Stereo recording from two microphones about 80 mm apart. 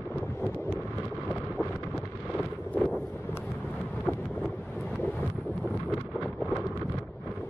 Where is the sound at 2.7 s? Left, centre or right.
Centre.